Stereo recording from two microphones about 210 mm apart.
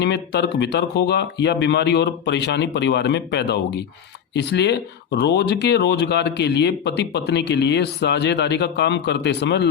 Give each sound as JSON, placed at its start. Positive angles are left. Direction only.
{"t": 0.0, "sound": "speech", "side_deg": 55}